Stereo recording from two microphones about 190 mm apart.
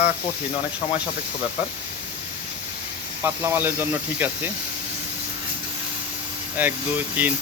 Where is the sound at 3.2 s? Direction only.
10° right (ahead or behind).